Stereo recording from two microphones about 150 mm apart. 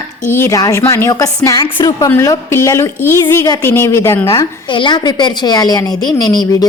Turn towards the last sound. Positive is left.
turn(degrees=25)  # may be behind; listen again after turning